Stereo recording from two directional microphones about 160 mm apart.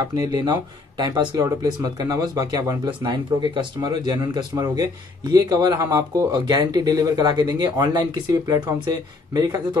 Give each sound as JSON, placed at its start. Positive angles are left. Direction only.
{"t": 0.0, "sound": "speech", "side_deg": -25}